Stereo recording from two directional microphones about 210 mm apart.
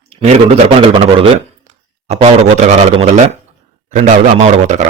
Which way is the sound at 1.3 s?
30° right (ahead or behind).